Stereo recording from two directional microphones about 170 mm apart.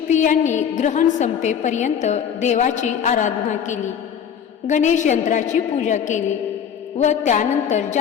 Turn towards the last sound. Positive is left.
turn(degrees=45)  # may be behind; listen again after turning